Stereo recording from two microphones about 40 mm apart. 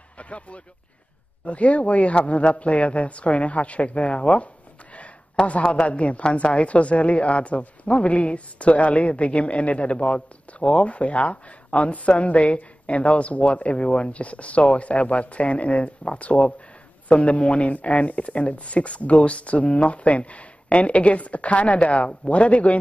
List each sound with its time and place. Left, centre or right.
0.2 s a woman's voice: left